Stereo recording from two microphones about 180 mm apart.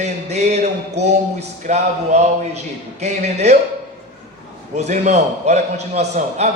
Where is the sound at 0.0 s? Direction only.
40° right (ahead or behind).